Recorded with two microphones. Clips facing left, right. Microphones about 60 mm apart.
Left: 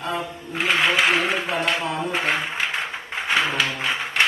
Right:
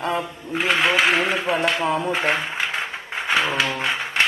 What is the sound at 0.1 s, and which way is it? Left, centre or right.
Speech, centre.